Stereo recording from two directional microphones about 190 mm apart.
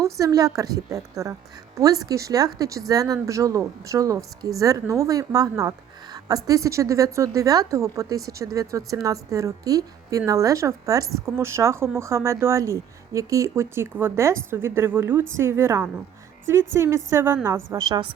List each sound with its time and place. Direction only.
0.0 s a woman's voice: 15° right (ahead or behind)